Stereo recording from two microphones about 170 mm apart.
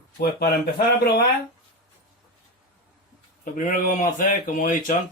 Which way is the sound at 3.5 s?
55° left (ahead or behind).